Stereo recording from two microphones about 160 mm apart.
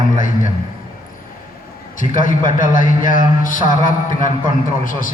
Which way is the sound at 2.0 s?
55° left (ahead or behind).